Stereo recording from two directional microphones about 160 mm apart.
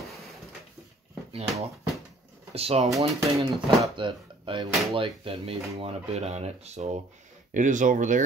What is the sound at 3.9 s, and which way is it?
Speech, 30° right (ahead or behind).